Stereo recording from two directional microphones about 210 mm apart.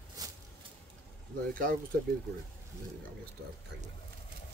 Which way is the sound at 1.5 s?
40° right (ahead or behind).